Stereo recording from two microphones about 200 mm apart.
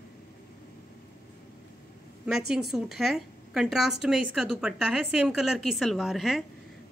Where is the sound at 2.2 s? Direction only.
Centre (ahead or behind).